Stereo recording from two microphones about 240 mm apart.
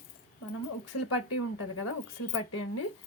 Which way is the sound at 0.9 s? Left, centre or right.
Left.